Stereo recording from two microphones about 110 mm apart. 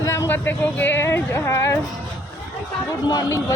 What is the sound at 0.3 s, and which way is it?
Speech, 20° left (ahead or behind).